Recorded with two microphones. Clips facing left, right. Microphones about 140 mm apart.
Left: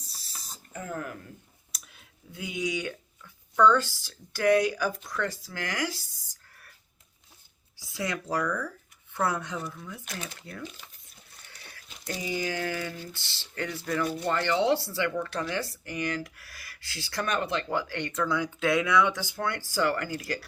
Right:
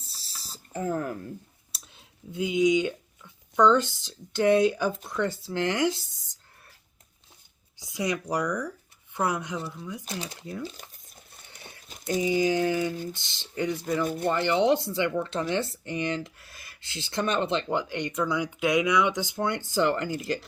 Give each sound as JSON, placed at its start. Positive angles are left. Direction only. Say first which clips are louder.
{"t": 0.0, "sound": "mechanisms", "louder": "even", "side_deg": -30}
{"t": 1.7, "sound": "speech", "louder": "even", "side_deg": -25}
{"t": 7.8, "sound": "speech", "louder": "right 4 dB", "side_deg": -20}
{"t": 10.1, "sound": "speech", "louder": "right 3 dB", "side_deg": -25}
{"t": 10.6, "sound": "a sound", "louder": "right 4 dB", "side_deg": -40}
{"t": 11.4, "sound": "pig", "louder": "right 3 dB", "side_deg": -20}
{"t": 12.2, "sound": "speech", "louder": "right 7 dB", "side_deg": -20}